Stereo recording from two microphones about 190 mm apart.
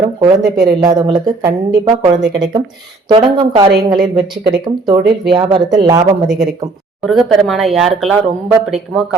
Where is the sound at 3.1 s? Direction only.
25° right (ahead or behind).